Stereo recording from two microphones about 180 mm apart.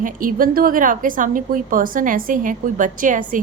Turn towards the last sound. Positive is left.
turn(degrees=-45)  # may be behind; listen again after turning